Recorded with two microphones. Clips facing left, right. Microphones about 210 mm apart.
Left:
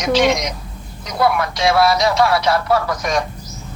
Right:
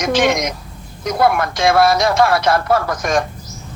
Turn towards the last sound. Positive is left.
turn(degrees=-50)  # may be behind; listen again after turning